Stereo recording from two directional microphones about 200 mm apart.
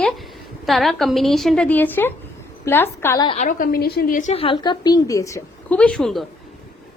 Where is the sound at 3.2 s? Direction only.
35° left (ahead or behind); by 6.2 s centre (ahead or behind).